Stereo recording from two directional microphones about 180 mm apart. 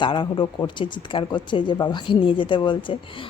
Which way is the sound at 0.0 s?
25° left (ahead or behind).